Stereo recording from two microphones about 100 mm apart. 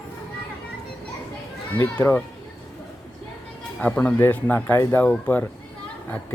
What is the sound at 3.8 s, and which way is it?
Speech, 10° left (ahead or behind).